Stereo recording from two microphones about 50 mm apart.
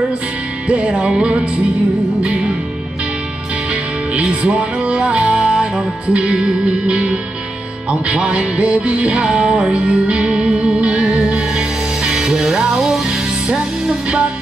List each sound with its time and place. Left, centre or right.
0.7 s music: right
4.1 s music: right